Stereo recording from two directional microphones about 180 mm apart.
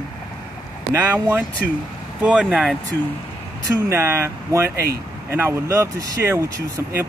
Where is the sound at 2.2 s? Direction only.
5° right (ahead or behind).